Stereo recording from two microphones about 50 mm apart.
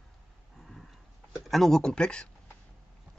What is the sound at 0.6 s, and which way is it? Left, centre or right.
Dog, centre.